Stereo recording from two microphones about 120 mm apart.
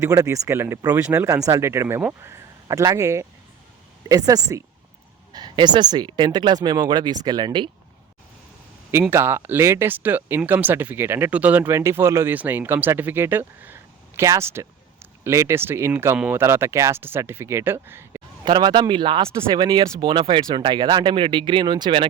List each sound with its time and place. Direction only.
0.0 s speech: 25° right (ahead or behind)
4.3 s speech: 30° right (ahead or behind)
8.9 s speech: 20° right (ahead or behind)
16.1 s speech: 10° right (ahead or behind)
16.4 s speech: 20° right (ahead or behind)
18.4 s speech: 40° right (ahead or behind)